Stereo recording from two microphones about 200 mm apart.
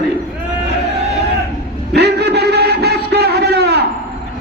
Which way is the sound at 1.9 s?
55° right (ahead or behind).